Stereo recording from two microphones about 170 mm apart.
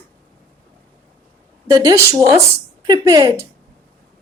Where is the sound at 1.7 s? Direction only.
20° right (ahead or behind).